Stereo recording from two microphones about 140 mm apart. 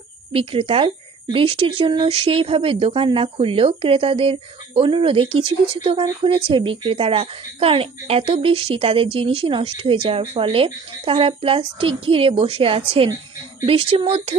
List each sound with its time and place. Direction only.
0.3 s speech: 40° right (ahead or behind)